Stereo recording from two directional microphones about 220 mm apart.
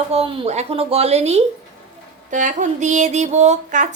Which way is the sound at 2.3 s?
35° right (ahead or behind).